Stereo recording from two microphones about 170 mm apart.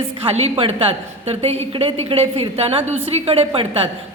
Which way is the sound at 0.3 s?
35° right (ahead or behind).